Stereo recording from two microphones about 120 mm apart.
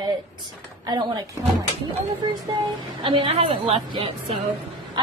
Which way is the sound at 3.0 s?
45° right (ahead or behind).